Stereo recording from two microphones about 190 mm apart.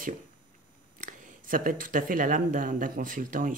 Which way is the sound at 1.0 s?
45° right (ahead or behind).